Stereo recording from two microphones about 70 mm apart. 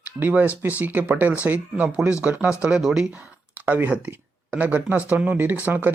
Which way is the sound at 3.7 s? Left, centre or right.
Right.